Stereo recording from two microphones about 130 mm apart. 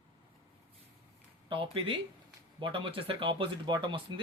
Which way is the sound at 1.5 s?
40° right (ahead or behind).